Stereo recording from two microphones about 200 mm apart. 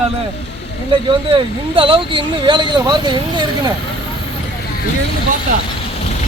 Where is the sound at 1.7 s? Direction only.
25° right (ahead or behind).